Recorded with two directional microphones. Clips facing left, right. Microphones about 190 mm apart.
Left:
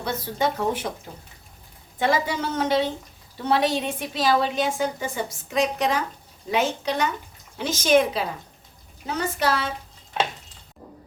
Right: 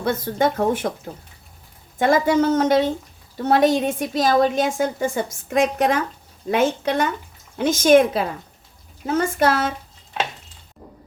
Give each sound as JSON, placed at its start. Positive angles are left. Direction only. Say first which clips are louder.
{"t": 0.0, "sound": "a woman's voice", "louder": "right 5 dB", "side_deg": -55}
{"t": 2.0, "sound": "a woman's voice", "louder": "right 7 dB", "side_deg": -50}